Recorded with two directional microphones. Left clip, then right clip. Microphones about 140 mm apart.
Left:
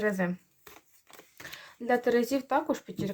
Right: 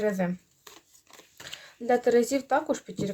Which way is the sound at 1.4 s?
30° right (ahead or behind).